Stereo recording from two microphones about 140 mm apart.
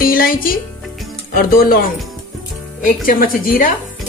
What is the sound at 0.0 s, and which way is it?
Speech, 90° left.